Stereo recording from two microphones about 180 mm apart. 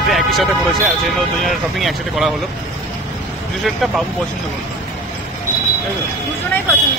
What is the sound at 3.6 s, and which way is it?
Speech, centre (ahead or behind).